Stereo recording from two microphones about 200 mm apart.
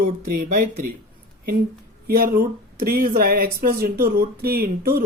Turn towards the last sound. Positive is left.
turn(degrees=-50)  # may be behind; listen again after turning